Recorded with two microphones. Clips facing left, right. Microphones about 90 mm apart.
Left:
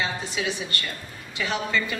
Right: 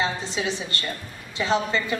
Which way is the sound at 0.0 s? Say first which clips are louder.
Right 2 dB; 30° right (ahead or behind).